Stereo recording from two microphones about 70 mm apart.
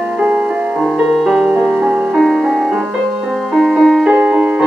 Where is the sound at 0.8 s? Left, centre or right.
Centre.